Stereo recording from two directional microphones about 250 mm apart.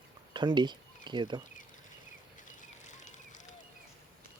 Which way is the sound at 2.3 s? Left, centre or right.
Left.